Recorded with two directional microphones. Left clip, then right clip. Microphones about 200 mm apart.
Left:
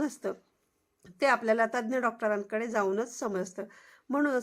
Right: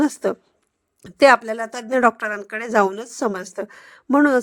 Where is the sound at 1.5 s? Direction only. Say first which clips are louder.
Even; centre (ahead or behind).